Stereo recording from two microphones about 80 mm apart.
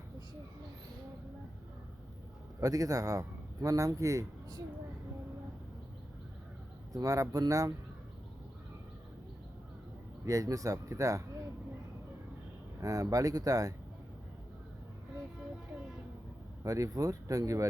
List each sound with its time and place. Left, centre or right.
2.6 s a man's voice: right
6.9 s speech: right
10.2 s speech: right
12.8 s speech: right
16.6 s speech: right